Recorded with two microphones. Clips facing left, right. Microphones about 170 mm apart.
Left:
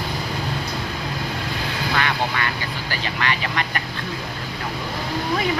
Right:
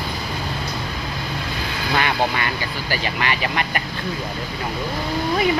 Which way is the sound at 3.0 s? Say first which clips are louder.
Even; 15° right (ahead or behind).